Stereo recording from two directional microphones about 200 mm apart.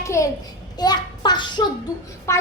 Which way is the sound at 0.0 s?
15° left (ahead or behind).